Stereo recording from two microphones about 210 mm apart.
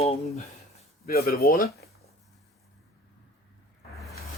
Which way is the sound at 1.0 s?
45° left (ahead or behind).